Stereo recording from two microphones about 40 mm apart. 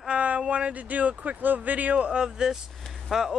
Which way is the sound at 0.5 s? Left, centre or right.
Right.